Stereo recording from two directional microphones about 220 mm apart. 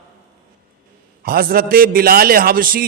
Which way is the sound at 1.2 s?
40° right (ahead or behind).